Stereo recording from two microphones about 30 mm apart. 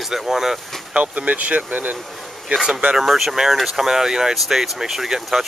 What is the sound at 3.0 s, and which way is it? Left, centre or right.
Speech, centre.